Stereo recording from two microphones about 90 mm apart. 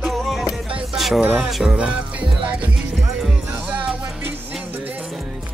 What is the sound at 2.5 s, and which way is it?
Music, 15° right (ahead or behind).